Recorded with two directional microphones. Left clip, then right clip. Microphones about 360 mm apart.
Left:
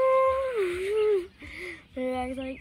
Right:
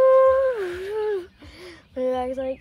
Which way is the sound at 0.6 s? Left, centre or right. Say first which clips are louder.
Left 1 dB; centre.